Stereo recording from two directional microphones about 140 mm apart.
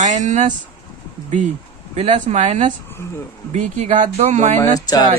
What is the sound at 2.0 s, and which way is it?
Speech, 60° right (ahead or behind).